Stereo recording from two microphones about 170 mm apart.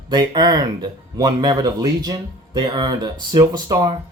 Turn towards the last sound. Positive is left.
turn(degrees=-25)  # may be behind; listen again after turning